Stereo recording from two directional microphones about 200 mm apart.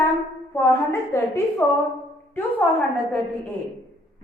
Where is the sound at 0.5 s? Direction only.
10° left (ahead or behind).